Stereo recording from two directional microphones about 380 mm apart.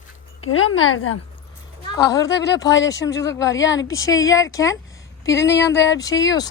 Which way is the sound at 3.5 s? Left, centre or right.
Left.